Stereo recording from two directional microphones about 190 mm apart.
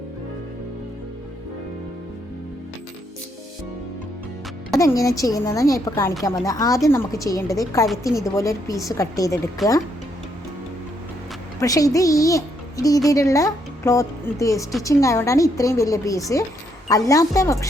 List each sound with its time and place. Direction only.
4.8 s speech: 15° left (ahead or behind)
9.6 s speech: centre (ahead or behind)
11.6 s a child's voice: 20° left (ahead or behind)